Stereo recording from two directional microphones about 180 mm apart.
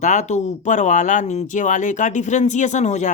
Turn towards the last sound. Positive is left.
turn(degrees=40)  # may be behind; listen again after turning